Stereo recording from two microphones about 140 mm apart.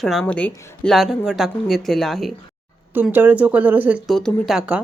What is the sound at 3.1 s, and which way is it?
Speech, 15° right (ahead or behind).